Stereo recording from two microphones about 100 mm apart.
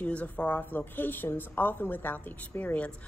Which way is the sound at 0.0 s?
15° left (ahead or behind).